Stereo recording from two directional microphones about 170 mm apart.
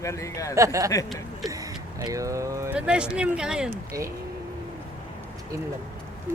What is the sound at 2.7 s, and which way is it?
Speech, 5° right (ahead or behind).